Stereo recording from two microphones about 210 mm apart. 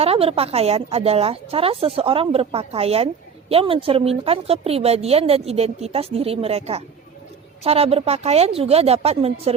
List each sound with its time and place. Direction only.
0.0 s a woman's voice: 25° right (ahead or behind)